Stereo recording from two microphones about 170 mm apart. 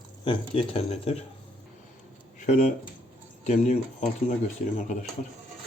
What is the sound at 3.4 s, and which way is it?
Speech, 45° left (ahead or behind).